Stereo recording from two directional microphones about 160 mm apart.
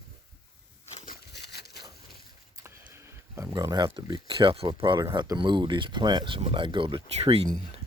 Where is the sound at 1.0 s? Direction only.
75° left (ahead or behind); by 1.8 s 90° left.